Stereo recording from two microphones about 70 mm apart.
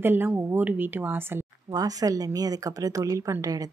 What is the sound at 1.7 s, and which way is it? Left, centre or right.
A woman's voice, right.